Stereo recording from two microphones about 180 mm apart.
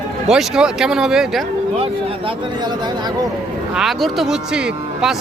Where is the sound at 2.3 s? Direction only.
25° right (ahead or behind).